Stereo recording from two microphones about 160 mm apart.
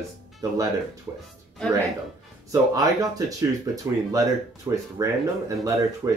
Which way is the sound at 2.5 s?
20° right (ahead or behind).